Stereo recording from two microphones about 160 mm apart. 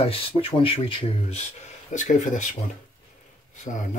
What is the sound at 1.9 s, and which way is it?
Speech, 50° left (ahead or behind).